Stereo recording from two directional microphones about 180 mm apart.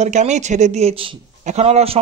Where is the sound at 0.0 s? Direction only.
40° right (ahead or behind).